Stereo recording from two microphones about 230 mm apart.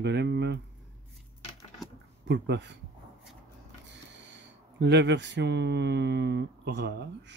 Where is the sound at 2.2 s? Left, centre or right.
Right.